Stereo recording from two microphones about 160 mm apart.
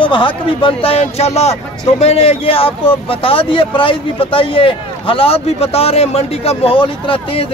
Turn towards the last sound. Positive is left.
turn(degrees=35)  # may be behind; listen again after turning